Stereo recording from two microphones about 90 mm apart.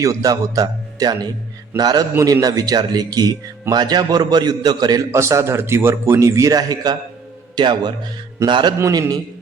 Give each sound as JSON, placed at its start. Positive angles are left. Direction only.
{"t": 0.0, "sound": "a man's voice", "side_deg": -40}
{"t": 5.1, "sound": "a man's voice", "side_deg": -35}
{"t": 8.8, "sound": "a man's voice", "side_deg": -45}